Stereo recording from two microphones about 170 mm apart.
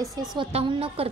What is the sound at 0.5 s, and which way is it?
Speech, 35° right (ahead or behind).